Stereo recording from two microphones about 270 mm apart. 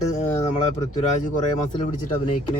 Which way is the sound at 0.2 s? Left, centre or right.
Left.